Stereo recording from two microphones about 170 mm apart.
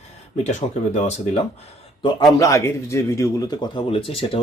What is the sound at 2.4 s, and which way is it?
Speech, 20° left (ahead or behind).